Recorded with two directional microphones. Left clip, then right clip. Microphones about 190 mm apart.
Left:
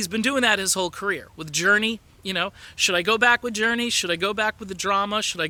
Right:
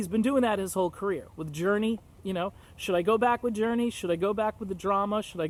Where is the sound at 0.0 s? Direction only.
15° left (ahead or behind).